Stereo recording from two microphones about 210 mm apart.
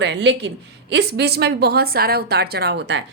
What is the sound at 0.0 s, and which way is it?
A woman's voice, 55° right (ahead or behind).